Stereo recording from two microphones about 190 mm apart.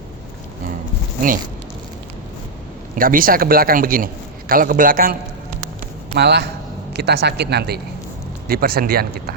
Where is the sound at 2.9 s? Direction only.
45° right (ahead or behind).